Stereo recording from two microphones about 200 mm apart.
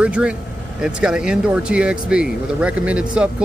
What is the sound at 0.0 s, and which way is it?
Speech, 5° right (ahead or behind).